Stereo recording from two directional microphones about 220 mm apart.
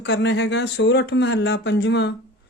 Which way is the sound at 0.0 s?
55° left (ahead or behind).